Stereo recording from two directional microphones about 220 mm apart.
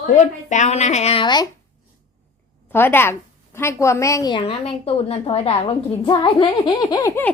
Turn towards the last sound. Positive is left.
turn(degrees=20)  # may be behind; listen again after turning